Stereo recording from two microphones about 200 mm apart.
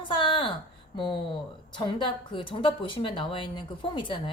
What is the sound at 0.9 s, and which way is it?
A woman's voice, 25° left (ahead or behind).